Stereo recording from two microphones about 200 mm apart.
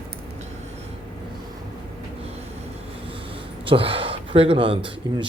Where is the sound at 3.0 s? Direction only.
25° right (ahead or behind).